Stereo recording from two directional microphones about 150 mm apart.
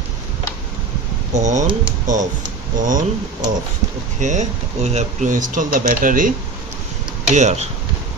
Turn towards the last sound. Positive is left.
turn(degrees=-50)  # may be behind; listen again after turning